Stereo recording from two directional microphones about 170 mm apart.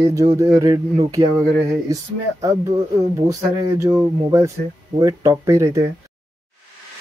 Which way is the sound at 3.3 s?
20° right (ahead or behind).